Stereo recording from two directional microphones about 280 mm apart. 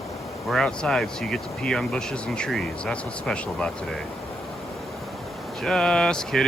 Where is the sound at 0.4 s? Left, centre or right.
Centre.